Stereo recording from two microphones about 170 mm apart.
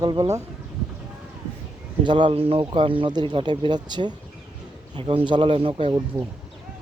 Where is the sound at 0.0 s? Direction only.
25° right (ahead or behind).